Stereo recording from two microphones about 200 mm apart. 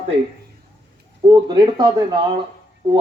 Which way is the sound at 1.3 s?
20° right (ahead or behind).